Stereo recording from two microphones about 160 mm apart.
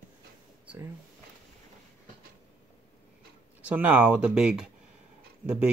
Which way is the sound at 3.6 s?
10° right (ahead or behind).